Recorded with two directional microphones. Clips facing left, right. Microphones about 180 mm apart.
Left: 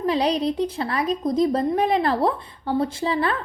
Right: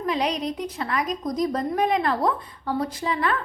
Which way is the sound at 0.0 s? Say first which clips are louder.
Left 4 dB; 30° left (ahead or behind).